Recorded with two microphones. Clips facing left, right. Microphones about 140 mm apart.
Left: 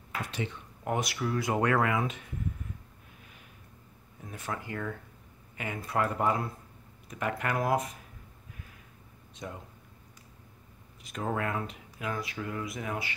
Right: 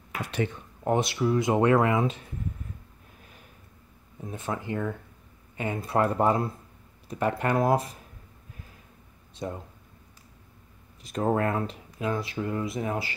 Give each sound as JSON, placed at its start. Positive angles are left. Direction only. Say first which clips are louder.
{"t": 0.3, "sound": "a sound", "louder": "right 9 dB", "side_deg": -55}
{"t": 0.8, "sound": "speech", "louder": "right 7 dB", "side_deg": -25}
{"t": 4.2, "sound": "speech", "louder": "right 5 dB", "side_deg": -25}
{"t": 9.3, "sound": "speech", "louder": "right 7 dB", "side_deg": -35}
{"t": 11.1, "sound": "speech", "louder": "right 7 dB", "side_deg": -35}